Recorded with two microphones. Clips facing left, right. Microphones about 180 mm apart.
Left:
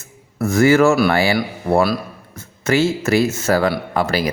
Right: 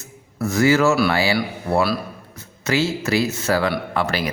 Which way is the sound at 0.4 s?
50° left (ahead or behind).